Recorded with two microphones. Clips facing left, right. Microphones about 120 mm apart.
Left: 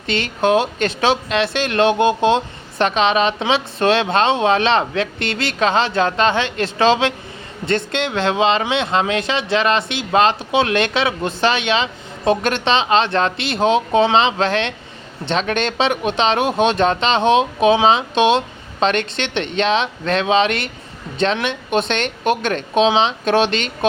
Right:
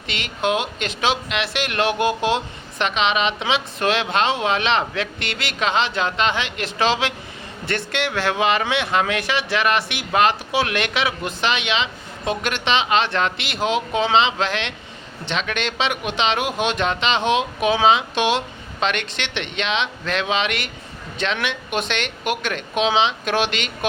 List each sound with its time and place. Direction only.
0.1 s speech: 35° left (ahead or behind)